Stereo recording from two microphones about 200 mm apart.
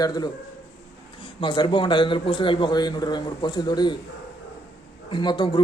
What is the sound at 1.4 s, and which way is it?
A man's voice, 25° left (ahead or behind).